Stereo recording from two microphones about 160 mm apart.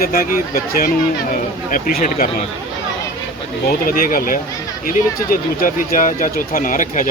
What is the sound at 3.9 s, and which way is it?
Speech, 60° left (ahead or behind).